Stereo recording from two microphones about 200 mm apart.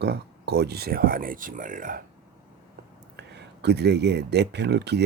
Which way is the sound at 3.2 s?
60° right (ahead or behind).